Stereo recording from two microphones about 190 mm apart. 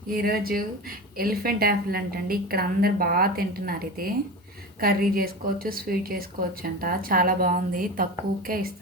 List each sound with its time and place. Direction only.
0.1 s speech: 50° right (ahead or behind)